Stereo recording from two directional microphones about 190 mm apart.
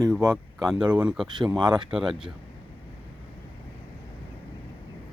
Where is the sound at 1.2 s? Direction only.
25° right (ahead or behind).